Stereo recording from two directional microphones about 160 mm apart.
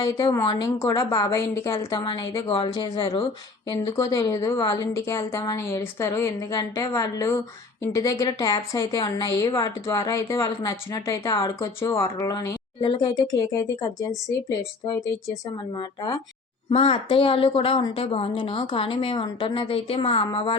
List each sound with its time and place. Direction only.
0.0 s a woman's voice: 20° left (ahead or behind)
16.6 s a woman's voice: 40° left (ahead or behind)